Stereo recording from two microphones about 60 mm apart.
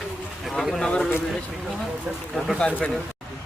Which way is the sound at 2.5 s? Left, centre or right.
Centre.